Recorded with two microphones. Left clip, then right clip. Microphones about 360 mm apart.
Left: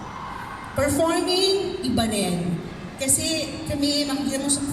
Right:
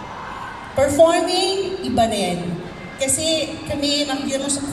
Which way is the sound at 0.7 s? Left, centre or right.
Centre.